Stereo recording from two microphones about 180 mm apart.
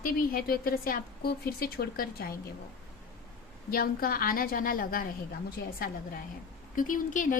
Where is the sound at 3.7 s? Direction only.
55° left (ahead or behind).